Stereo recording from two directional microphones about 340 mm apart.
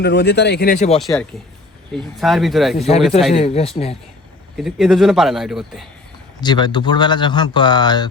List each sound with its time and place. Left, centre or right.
0.0 s speech: left
0.9 s a man's voice: centre
3.3 s speech: centre
4.5 s a man's voice: centre
6.4 s speech: centre